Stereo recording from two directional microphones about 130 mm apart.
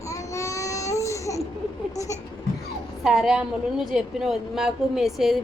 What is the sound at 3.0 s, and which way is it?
A woman's voice, 5° right (ahead or behind).